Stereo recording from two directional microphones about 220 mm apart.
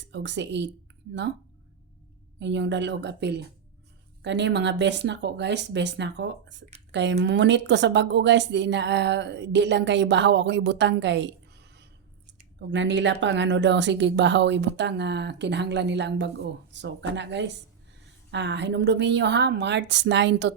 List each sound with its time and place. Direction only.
0.1 s speech: 55° right (ahead or behind)
2.4 s speech: 55° right (ahead or behind)